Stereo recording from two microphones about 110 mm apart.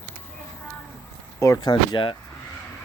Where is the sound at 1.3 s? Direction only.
25° left (ahead or behind).